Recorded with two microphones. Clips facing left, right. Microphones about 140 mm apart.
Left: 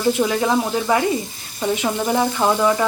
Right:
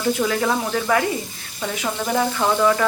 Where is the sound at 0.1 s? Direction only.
15° left (ahead or behind).